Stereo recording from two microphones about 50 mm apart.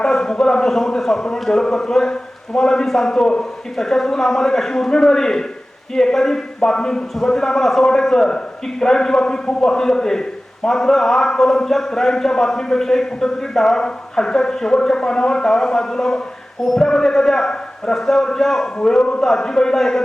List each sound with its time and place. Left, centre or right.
0.0 s a man's voice: centre